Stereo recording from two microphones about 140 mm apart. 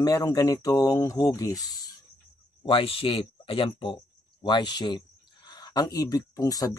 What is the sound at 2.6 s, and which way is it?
Speech, 40° left (ahead or behind).